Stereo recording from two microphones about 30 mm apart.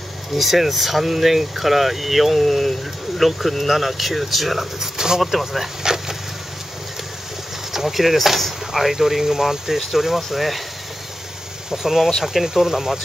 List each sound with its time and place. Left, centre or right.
0.3 s speech: centre
4.7 s speech: centre
5.9 s a sound: right
7.7 s speech: centre
11.7 s speech: centre
12.4 s speech: centre